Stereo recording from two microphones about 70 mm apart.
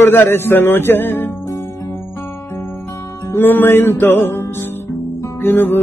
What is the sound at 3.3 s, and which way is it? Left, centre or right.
Music, left.